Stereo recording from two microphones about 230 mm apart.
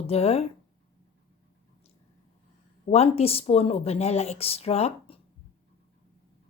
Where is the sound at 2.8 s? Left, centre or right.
Left.